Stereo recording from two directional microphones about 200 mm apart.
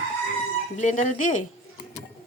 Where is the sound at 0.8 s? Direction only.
35° left (ahead or behind).